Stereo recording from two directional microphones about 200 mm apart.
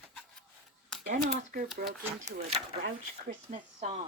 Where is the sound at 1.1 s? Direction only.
40° right (ahead or behind).